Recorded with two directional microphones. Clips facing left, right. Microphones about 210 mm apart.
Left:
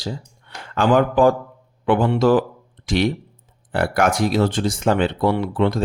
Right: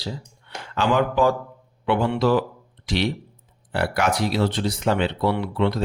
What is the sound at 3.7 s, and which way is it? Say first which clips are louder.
Speech: left 4 dB; 50° left (ahead or behind).